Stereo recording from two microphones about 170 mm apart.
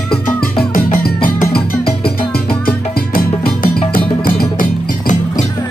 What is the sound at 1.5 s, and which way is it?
Music, 65° left (ahead or behind).